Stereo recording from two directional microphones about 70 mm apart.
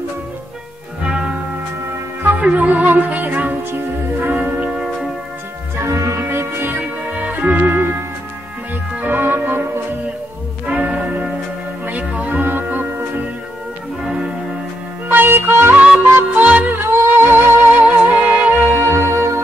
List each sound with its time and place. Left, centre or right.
1.1 s music: centre
5.8 s music: right
6.2 s music: right
6.8 s music: centre
9.0 s organ: right
10.7 s music: right
14.0 s music: centre
15.0 s music: right
18.8 s music: right